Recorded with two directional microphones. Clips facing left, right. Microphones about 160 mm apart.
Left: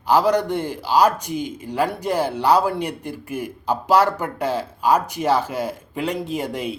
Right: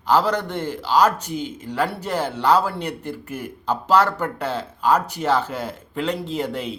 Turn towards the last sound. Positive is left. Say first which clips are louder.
# even
turn(degrees=10)  # may be behind; listen again after turning